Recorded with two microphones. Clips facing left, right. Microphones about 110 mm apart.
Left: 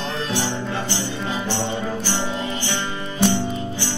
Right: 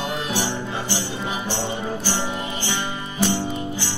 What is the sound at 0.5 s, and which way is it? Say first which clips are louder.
Music: left 1 dB; 20° left (ahead or behind).